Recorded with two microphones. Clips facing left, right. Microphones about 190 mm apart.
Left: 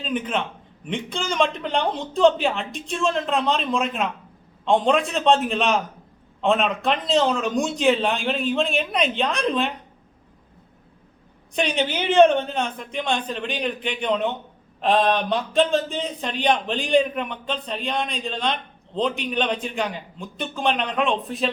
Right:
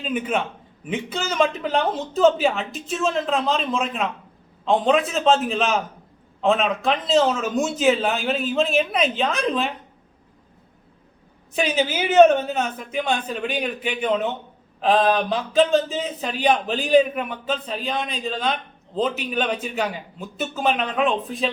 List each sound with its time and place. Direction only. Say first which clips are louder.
0.0 s speech: right 1 dB; 10° right (ahead or behind)
11.5 s speech: right 1 dB; 5° right (ahead or behind)